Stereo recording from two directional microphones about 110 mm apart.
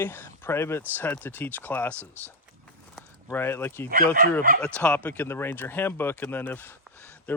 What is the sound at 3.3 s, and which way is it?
Speech, 20° left (ahead or behind).